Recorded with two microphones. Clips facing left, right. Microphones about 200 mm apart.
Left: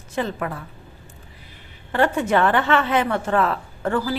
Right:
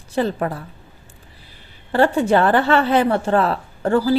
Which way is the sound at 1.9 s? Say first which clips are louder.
Right 4 dB; 30° right (ahead or behind).